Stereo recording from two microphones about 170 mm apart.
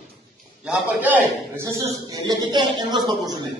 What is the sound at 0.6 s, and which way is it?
A man's voice, 10° right (ahead or behind).